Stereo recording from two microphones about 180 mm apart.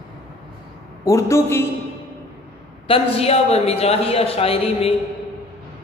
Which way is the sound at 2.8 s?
35° left (ahead or behind).